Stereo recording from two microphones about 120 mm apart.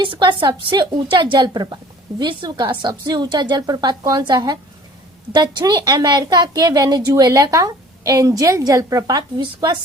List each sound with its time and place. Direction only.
0.0 s a woman's voice: 40° right (ahead or behind)